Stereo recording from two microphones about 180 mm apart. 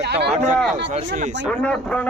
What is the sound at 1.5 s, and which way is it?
Speech, 5° left (ahead or behind).